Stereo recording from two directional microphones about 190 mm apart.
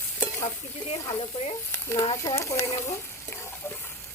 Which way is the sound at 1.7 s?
10° left (ahead or behind).